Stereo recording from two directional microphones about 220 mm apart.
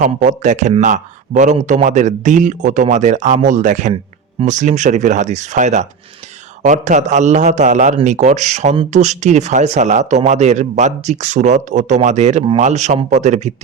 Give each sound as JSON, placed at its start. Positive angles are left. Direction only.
{"t": 0.0, "sound": "a man's voice", "side_deg": -35}